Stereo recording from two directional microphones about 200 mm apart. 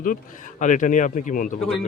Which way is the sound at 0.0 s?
40° left (ahead or behind).